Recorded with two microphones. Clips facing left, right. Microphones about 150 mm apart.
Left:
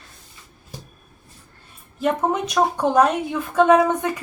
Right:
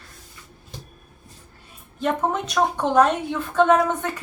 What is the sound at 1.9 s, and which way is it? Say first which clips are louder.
A woman's voice: left 2 dB; 10° left (ahead or behind).